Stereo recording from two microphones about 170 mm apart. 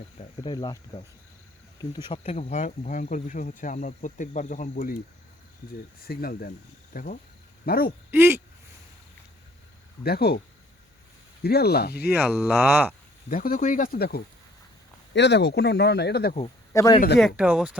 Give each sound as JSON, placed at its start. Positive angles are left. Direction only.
{"t": 0.4, "sound": "speech", "side_deg": 25}
{"t": 2.0, "sound": "speech", "side_deg": 35}
{"t": 6.0, "sound": "speech", "side_deg": 60}
{"t": 8.1, "sound": "speech", "side_deg": -15}
{"t": 10.0, "sound": "speech", "side_deg": 65}
{"t": 11.4, "sound": "speech", "side_deg": 70}
{"t": 12.0, "sound": "speech", "side_deg": -5}
{"t": 13.2, "sound": "speech", "side_deg": 55}
{"t": 15.1, "sound": "speech", "side_deg": 90}
{"t": 16.7, "sound": "speech", "side_deg": 20}
{"t": 17.2, "sound": "speech", "side_deg": 0}